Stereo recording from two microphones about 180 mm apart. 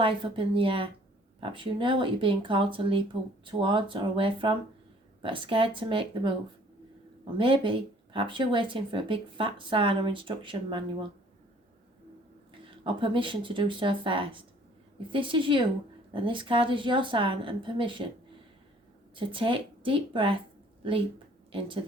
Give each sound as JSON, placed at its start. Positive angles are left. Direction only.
{"t": 0.0, "sound": "speech", "side_deg": -30}
{"t": 7.3, "sound": "speech", "side_deg": -30}
{"t": 12.8, "sound": "speech", "side_deg": -30}
{"t": 19.1, "sound": "speech", "side_deg": -30}